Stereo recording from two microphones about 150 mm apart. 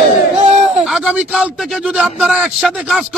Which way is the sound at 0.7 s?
5° right (ahead or behind).